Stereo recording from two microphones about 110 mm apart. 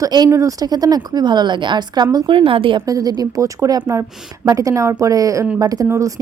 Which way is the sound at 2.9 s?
35° right (ahead or behind).